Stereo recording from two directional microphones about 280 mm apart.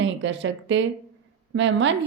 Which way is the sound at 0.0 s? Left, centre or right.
Right.